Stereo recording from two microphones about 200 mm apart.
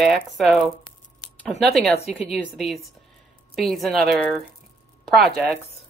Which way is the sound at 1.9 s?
30° left (ahead or behind).